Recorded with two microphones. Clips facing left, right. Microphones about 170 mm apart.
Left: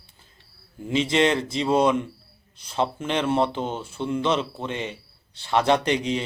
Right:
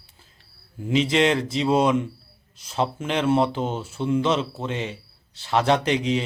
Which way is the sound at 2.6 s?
5° right (ahead or behind).